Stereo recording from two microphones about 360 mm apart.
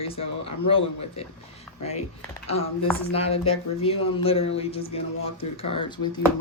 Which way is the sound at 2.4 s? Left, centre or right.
Centre.